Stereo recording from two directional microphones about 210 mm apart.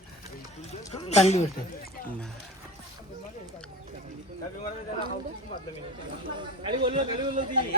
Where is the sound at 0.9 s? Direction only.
30° left (ahead or behind).